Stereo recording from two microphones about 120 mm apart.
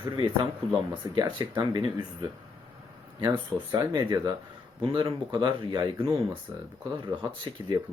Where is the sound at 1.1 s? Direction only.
35° right (ahead or behind).